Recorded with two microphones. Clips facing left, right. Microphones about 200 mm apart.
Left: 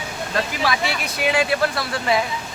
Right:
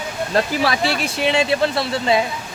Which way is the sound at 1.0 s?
25° right (ahead or behind).